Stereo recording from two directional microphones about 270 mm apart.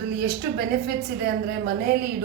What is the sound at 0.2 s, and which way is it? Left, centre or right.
A woman's voice, right.